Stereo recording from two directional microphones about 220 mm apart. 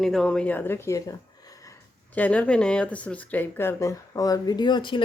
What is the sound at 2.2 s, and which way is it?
Speech, 5° left (ahead or behind).